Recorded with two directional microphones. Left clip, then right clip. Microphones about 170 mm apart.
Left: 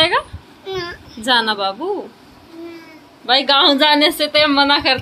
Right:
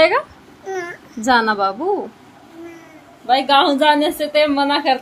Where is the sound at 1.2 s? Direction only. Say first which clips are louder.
Right 1 dB; 60° right (ahead or behind).